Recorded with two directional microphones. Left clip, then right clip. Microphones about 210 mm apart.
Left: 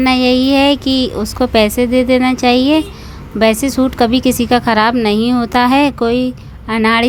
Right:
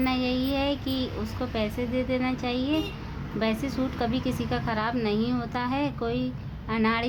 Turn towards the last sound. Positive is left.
turn(degrees=35)  # may be behind; listen again after turning